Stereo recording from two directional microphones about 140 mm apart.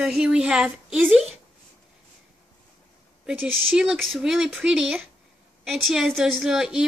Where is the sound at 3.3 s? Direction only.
5° right (ahead or behind).